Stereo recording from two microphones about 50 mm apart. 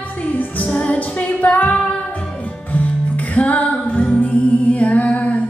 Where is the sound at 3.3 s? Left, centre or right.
Left.